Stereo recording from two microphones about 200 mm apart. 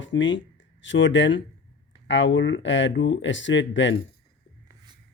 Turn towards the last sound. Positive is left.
turn(degrees=65)  # may be behind; listen again after turning